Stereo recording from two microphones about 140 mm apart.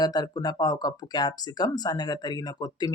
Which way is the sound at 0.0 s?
30° left (ahead or behind).